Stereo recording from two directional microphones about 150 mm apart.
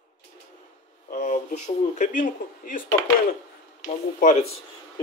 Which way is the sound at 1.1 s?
55° left (ahead or behind).